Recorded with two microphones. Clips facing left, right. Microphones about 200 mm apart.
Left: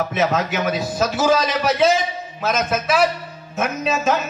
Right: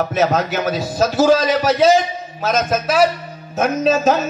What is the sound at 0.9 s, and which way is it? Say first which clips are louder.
A man's voice: right 5 dB; 40° right (ahead or behind).